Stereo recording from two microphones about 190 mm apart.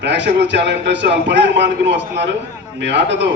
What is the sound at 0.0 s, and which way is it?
A man's voice, 65° right (ahead or behind).